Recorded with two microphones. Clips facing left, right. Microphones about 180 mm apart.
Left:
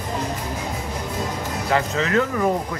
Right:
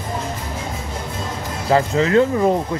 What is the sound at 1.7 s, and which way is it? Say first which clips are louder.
Speech: right 6 dB; 30° right (ahead or behind).